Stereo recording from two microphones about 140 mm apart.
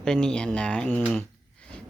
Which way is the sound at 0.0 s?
5° left (ahead or behind).